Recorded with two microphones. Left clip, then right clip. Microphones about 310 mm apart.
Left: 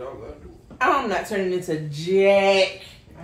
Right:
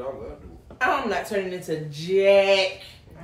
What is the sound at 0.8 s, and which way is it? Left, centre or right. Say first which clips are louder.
Speech: left 3 dB; left.